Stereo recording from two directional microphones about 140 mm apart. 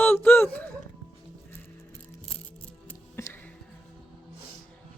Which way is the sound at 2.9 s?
15° left (ahead or behind).